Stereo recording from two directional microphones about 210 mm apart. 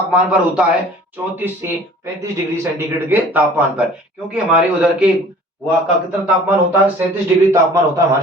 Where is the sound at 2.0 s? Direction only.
15° right (ahead or behind).